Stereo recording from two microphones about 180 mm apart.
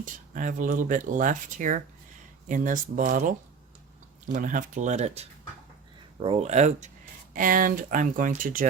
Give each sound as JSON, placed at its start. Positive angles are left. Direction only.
{"t": 0.0, "sound": "speech", "side_deg": -45}